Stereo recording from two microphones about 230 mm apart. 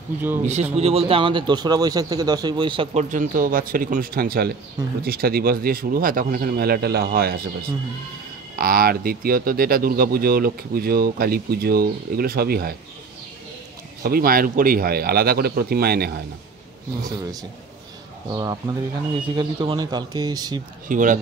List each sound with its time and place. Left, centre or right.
0.4 s speech: right
14.0 s speech: right
18.3 s speech: centre
20.9 s speech: right